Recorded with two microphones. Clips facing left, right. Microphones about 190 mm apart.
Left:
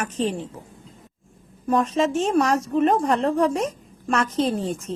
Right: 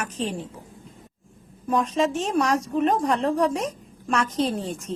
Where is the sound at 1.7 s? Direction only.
Centre (ahead or behind).